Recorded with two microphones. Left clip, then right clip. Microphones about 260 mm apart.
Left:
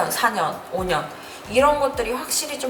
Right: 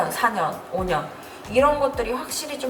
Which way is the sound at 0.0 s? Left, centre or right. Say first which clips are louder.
Left 1 dB; centre.